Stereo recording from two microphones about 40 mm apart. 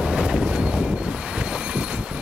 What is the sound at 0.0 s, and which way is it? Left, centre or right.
Vehicle, centre.